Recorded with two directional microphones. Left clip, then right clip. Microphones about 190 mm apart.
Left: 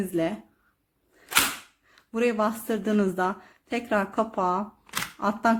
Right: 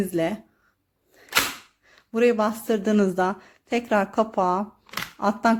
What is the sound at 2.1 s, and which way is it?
Speech, 25° right (ahead or behind).